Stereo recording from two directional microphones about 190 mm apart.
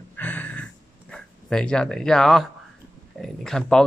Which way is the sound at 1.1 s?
5° left (ahead or behind).